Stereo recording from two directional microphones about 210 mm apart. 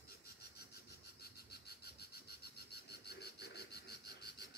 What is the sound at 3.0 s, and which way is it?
Cricket, 50° left (ahead or behind).